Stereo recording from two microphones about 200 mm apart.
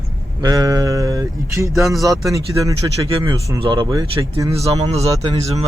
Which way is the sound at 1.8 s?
Centre (ahead or behind).